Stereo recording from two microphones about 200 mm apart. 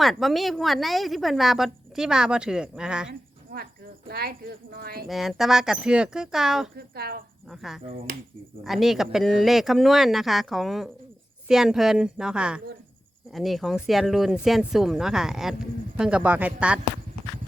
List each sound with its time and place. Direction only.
0.0 s a woman's voice: centre (ahead or behind)
3.1 s a sound: 50° right (ahead or behind)
4.1 s speech: 50° right (ahead or behind)
5.0 s a woman's voice: centre (ahead or behind)
6.7 s speech: 50° right (ahead or behind)
7.5 s a woman's voice: centre (ahead or behind)